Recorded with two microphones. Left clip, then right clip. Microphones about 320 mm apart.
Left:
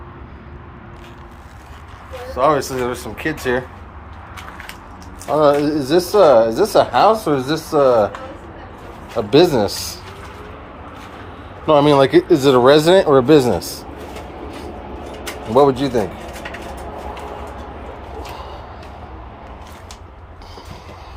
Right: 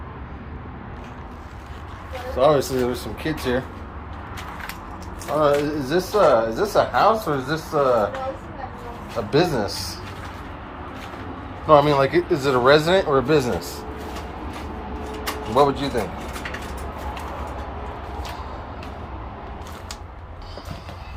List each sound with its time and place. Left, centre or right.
2.3 s speech: centre
5.3 s speech: left
9.3 s speech: left
11.6 s speech: left
15.5 s speech: left